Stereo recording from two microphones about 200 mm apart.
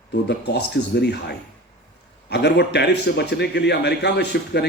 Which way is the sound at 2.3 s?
55° left (ahead or behind).